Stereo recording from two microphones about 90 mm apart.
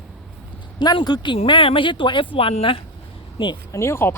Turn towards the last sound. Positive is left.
turn(degrees=30)  # may be behind; listen again after turning